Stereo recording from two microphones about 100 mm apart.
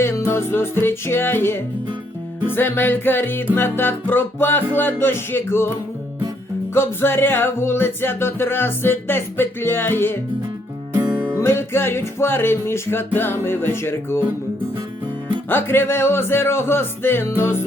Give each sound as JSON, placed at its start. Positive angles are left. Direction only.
{"t": 0.0, "sound": "music", "side_deg": 25}
{"t": 6.7, "sound": "music", "side_deg": 25}
{"t": 10.9, "sound": "music", "side_deg": -15}
{"t": 11.3, "sound": "music", "side_deg": 25}
{"t": 15.4, "sound": "music", "side_deg": 20}